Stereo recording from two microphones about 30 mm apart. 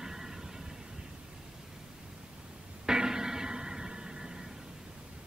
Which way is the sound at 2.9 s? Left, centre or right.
Right.